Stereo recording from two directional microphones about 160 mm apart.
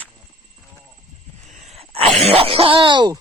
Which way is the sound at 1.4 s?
50° right (ahead or behind).